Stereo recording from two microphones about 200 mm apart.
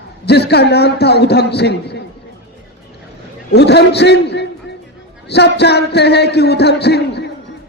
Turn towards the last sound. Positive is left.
turn(degrees=55)  # may be behind; listen again after turning